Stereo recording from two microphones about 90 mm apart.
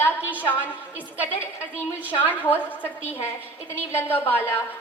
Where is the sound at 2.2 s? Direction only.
20° left (ahead or behind).